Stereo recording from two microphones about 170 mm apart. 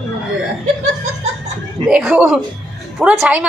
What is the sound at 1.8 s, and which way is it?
A woman's voice, 5° right (ahead or behind).